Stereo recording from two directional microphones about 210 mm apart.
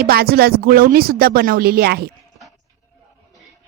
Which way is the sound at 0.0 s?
45° right (ahead or behind).